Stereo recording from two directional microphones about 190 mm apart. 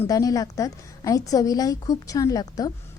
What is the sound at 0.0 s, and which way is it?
A woman's voice, 20° left (ahead or behind).